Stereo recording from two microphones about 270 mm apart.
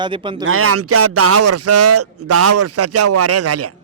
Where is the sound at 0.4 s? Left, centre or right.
Right.